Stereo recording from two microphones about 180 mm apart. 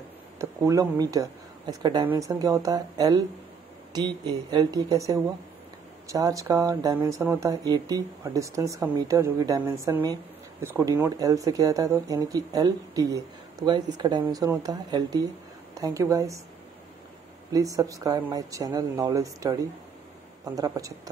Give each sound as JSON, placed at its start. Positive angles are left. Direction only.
{"t": 0.4, "sound": "speech", "side_deg": -20}
{"t": 17.5, "sound": "speech", "side_deg": -20}